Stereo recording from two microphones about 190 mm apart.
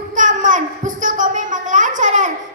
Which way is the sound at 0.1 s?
40° right (ahead or behind).